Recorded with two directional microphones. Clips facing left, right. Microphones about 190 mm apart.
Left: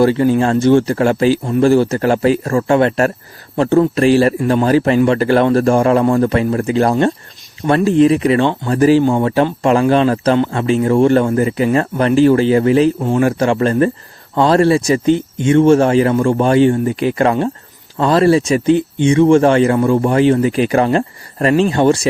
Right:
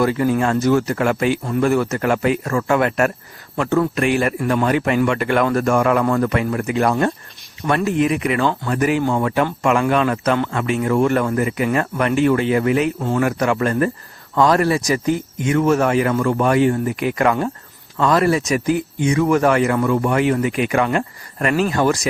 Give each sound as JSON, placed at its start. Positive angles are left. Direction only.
{"t": 0.0, "sound": "speech", "side_deg": 30}
{"t": 13.0, "sound": "a man's voice", "side_deg": 15}
{"t": 13.2, "sound": "speech", "side_deg": 30}